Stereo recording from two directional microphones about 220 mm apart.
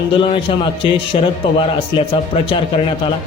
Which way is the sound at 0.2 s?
25° left (ahead or behind).